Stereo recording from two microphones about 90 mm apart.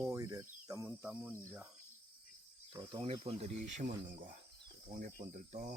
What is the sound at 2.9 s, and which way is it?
Speech, 90° right.